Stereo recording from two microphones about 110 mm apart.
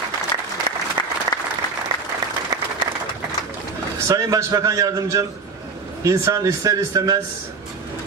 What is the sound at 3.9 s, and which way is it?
A man's voice, 30° right (ahead or behind).